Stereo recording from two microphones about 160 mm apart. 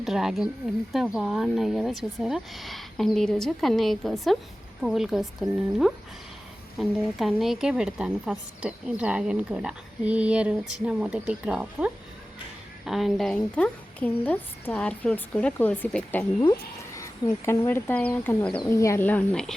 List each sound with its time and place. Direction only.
0.0 s a woman's voice: centre (ahead or behind)